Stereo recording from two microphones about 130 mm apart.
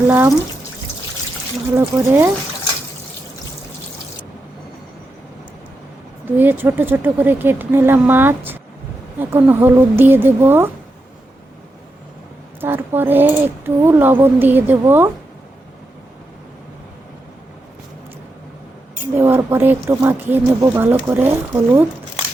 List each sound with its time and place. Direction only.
0.1 s speech: 20° right (ahead or behind)
1.7 s speech: 20° right (ahead or behind)
6.3 s speech: 15° right (ahead or behind)
12.5 s speech: 15° right (ahead or behind)
19.1 s speech: 20° right (ahead or behind)